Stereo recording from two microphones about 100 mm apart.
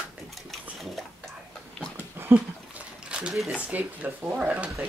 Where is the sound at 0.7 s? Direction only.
Centre (ahead or behind).